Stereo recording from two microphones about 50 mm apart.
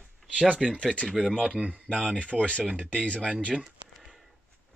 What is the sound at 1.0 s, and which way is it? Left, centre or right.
Speech, centre.